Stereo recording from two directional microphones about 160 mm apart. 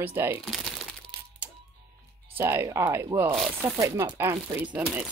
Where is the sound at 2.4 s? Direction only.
15° right (ahead or behind).